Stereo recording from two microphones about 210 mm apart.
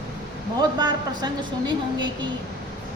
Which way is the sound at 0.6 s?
20° right (ahead or behind).